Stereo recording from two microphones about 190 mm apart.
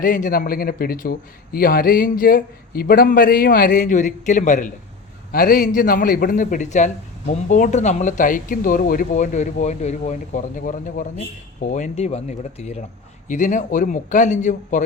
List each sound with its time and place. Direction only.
0.0 s a man's voice: 45° left (ahead or behind)